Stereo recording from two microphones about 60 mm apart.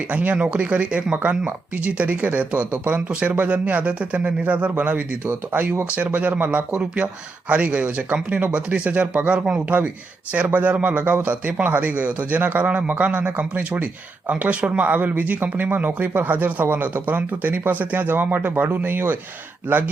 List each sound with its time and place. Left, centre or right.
0.1 s speech: right